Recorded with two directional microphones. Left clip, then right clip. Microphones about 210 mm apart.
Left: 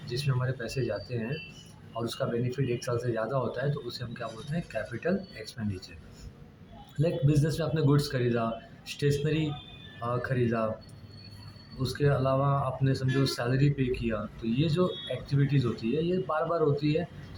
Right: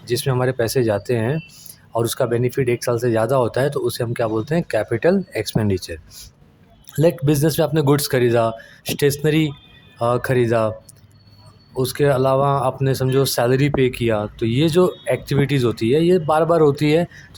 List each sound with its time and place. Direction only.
0.1 s speech: 45° right (ahead or behind)
7.0 s speech: 50° right (ahead or behind)
11.8 s speech: 50° right (ahead or behind)